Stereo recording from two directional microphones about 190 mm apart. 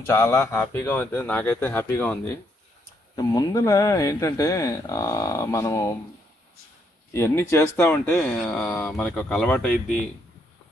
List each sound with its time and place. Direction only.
0.0 s speech: 15° left (ahead or behind)
7.2 s speech: 15° left (ahead or behind)